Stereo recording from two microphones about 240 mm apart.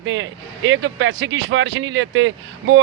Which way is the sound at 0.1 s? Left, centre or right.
Right.